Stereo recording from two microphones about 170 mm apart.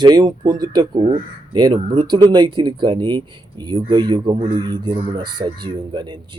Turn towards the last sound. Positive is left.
turn(degrees=-30)  # may be behind; listen again after turning